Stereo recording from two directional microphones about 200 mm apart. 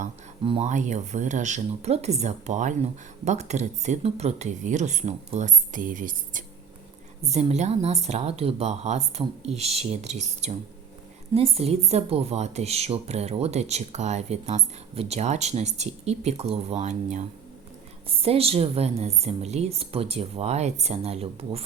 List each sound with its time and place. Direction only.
0.4 s speech: 30° right (ahead or behind)